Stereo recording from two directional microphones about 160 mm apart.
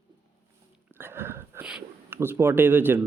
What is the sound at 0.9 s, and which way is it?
Whispering, 15° right (ahead or behind).